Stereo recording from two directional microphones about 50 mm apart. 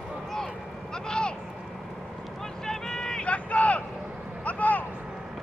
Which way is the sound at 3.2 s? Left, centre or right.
Left.